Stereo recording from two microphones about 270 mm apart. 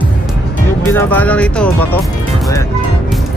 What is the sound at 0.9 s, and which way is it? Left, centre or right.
Speech, centre.